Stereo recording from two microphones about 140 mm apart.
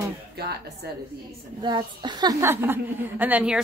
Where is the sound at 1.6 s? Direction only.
35° right (ahead or behind).